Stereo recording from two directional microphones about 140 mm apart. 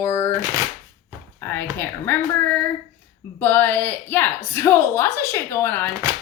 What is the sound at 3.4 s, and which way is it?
A woman's voice, 15° left (ahead or behind).